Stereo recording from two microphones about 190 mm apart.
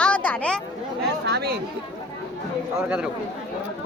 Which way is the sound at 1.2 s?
60° right (ahead or behind).